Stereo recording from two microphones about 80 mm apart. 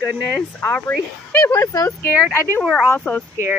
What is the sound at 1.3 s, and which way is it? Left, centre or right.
Speech, left.